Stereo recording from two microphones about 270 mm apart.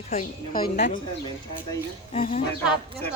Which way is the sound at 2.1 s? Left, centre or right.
Left.